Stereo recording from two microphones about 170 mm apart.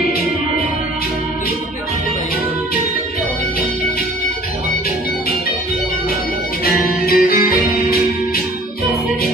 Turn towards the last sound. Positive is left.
turn(degrees=60)  # may be behind; listen again after turning